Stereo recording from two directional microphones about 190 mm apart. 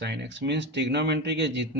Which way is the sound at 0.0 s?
70° right (ahead or behind).